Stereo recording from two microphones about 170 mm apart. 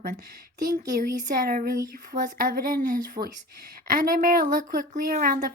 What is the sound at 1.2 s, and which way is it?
A woman's voice, 55° right (ahead or behind).